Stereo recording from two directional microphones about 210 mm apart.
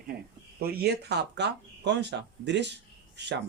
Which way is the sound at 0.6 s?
50° right (ahead or behind).